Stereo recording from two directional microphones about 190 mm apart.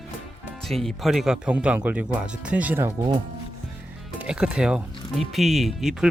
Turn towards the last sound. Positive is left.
turn(degrees=0)  # may be behind; listen again after turning